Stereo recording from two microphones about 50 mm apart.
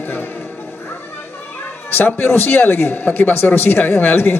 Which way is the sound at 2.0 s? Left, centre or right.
Left.